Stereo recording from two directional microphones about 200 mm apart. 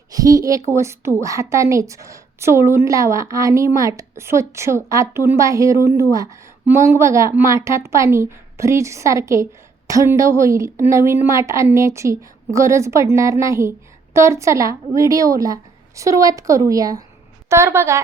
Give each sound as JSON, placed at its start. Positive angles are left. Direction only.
{"t": 0.1, "sound": "a woman's voice", "side_deg": -20}